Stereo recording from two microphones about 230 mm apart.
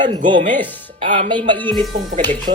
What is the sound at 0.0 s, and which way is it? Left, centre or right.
Speech, right.